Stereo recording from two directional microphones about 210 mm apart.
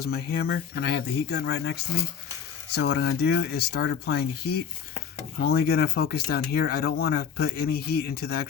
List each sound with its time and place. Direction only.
0.0 s speech: 50° left (ahead or behind)
5.4 s speech: 50° left (ahead or behind)